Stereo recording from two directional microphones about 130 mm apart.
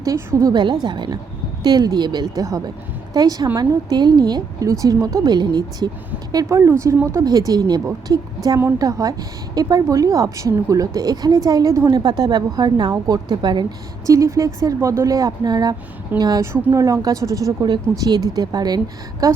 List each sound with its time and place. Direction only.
0.0 s a woman's voice: 25° right (ahead or behind)
0.6 s a woman's voice: 35° right (ahead or behind)
6.3 s a woman's voice: 20° right (ahead or behind)